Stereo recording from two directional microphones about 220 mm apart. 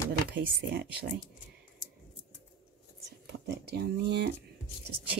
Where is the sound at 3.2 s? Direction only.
50° right (ahead or behind).